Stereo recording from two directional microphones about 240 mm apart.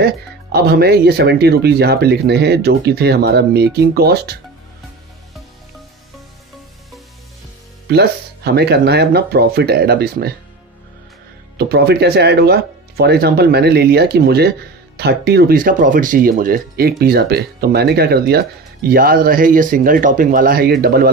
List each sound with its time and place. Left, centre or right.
0.0 s speech: right
7.9 s speech: right
11.5 s speech: right